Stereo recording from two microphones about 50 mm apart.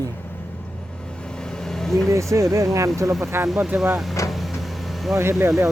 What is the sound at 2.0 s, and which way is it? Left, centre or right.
Speech, right.